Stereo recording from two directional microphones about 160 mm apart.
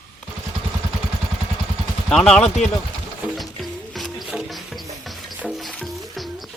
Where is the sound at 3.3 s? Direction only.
Centre (ahead or behind).